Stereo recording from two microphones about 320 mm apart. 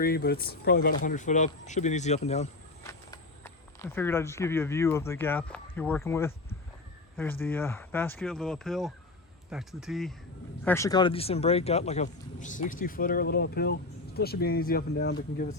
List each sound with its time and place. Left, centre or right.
0.0 s speech: left
2.8 s speech: centre; by 15.1 s left